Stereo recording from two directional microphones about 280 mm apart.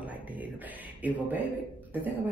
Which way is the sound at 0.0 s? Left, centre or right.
Centre.